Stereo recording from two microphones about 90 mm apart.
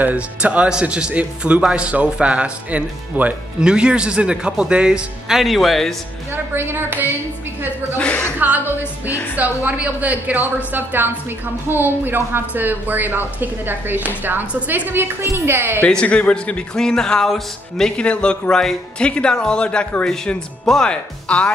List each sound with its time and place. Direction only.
0.0 s speech: 15° right (ahead or behind); by 5.9 s centre (ahead or behind)
6.3 s speech: 25° right (ahead or behind)
8.0 s speech: 15° left (ahead or behind)
8.4 s speech: 20° right (ahead or behind)
15.9 s speech: 10° left (ahead or behind)